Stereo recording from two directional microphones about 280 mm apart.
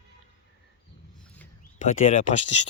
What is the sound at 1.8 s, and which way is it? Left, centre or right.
Speech, left.